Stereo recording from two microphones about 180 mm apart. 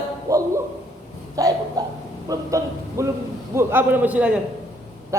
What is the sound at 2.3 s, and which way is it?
A man's voice, 20° right (ahead or behind).